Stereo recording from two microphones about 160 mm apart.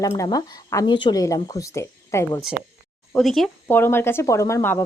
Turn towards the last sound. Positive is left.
turn(degrees=15)  # may be behind; listen again after turning